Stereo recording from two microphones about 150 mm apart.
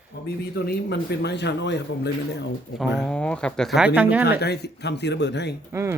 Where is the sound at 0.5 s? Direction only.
90° left.